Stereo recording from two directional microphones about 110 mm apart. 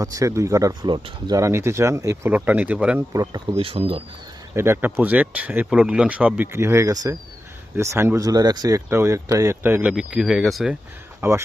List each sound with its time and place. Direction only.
0.0 s speech: 30° right (ahead or behind)
1.4 s speech: 25° right (ahead or behind)
2.3 s speech: 15° right (ahead or behind)
3.1 s speech: 35° right (ahead or behind)
3.6 s speech: 60° right (ahead or behind)
4.5 s speech: 20° right (ahead or behind)
8.9 s speech: 25° right (ahead or behind)
9.9 s speech: 5° right (ahead or behind)
11.2 s speech: 25° right (ahead or behind)